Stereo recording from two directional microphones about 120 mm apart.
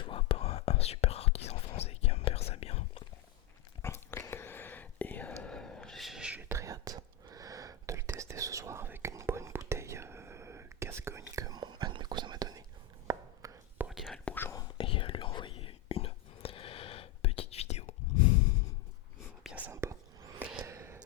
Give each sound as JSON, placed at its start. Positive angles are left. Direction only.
{"t": 0.0, "sound": "whispering", "side_deg": 50}
{"t": 3.8, "sound": "whispering", "side_deg": 20}
{"t": 6.5, "sound": "whispering", "side_deg": -25}
{"t": 13.1, "sound": "chopping", "side_deg": -30}
{"t": 13.7, "sound": "whispering", "side_deg": -5}
{"t": 14.3, "sound": "whispering", "side_deg": 15}
{"t": 14.8, "sound": "whispering", "side_deg": 45}
{"t": 19.7, "sound": "whispering", "side_deg": -25}
{"t": 20.4, "sound": "a sound", "side_deg": -15}
{"t": 20.7, "sound": "whispering", "side_deg": -25}